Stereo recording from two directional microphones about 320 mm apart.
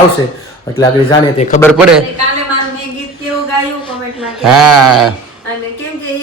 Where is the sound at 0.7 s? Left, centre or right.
Centre.